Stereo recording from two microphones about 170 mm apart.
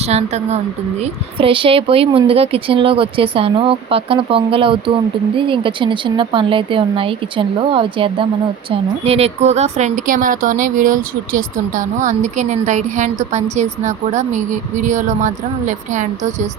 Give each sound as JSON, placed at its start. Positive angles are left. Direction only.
{"t": 0.0, "sound": "a woman's voice", "side_deg": -40}